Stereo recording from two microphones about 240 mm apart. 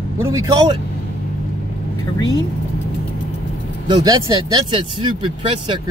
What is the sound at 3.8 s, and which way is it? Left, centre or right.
Speech, centre.